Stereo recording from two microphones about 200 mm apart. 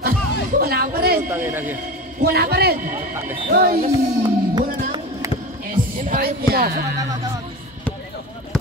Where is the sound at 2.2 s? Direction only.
50° right (ahead or behind).